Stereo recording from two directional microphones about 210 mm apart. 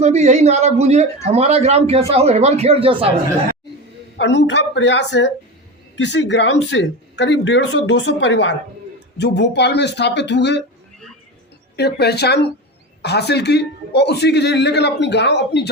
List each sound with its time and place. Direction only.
0.0 s a man's voice: 30° right (ahead or behind)
4.2 s speech: 60° left (ahead or behind)
11.8 s a man's voice: 50° left (ahead or behind)